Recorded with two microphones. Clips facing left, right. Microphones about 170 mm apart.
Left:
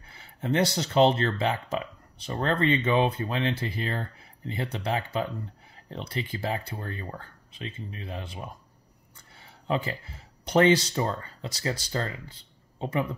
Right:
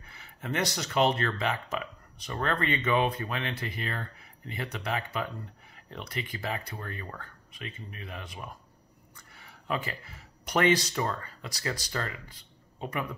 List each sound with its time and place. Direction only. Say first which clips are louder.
0.0 s speech: left 6 dB; 30° left (ahead or behind)